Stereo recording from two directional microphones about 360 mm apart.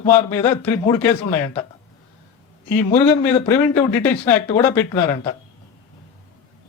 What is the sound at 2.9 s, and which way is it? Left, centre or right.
A man's voice, centre.